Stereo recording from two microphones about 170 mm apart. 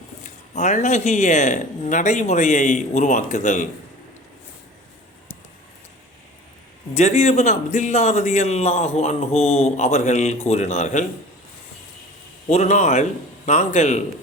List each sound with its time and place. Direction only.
0.5 s speech: 45° left (ahead or behind)
6.9 s a man's voice: 40° left (ahead or behind)
12.5 s speech: 40° left (ahead or behind)